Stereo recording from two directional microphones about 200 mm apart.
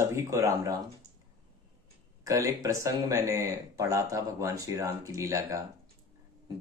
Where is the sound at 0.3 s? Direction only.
15° right (ahead or behind).